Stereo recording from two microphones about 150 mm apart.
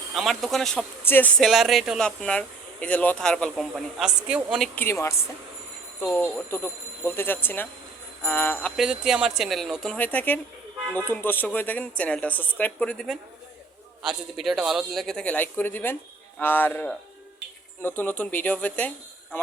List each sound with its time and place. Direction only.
0.1 s a man's voice: centre (ahead or behind)
1.0 s speech: 15° left (ahead or behind)
1.4 s a man's voice: centre (ahead or behind)
4.7 s speech: 15° left (ahead or behind)
8.7 s a man's voice: 5° right (ahead or behind)